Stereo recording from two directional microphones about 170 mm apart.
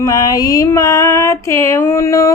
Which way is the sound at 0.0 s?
20° left (ahead or behind).